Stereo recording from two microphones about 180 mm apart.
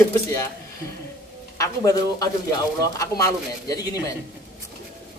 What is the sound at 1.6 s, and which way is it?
Speech, 20° left (ahead or behind).